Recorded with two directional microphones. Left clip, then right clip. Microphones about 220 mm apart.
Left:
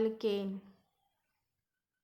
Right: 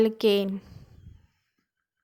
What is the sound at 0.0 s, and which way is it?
Speech, 40° right (ahead or behind).